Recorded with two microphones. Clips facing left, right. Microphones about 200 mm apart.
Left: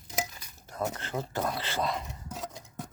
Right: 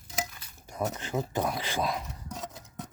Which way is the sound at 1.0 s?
15° right (ahead or behind).